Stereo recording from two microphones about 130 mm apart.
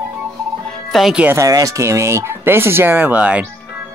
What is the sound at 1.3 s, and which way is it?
Speech, 25° right (ahead or behind).